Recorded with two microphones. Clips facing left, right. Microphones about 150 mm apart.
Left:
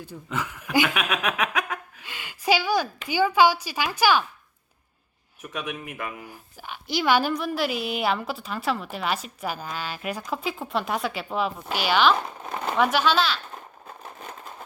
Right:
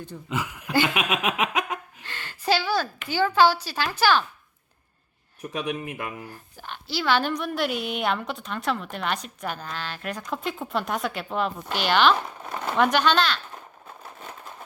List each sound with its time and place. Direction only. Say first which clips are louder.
0.1 s a woman's voice: right 1 dB; centre (ahead or behind)
0.9 s a sound: right 1 dB; 25° right (ahead or behind)
2.0 s speech: left 1 dB; 10° left (ahead or behind)
5.4 s speech: right 4 dB; 30° right (ahead or behind)
6.2 s a woman's voice: right 1 dB; 10° left (ahead or behind)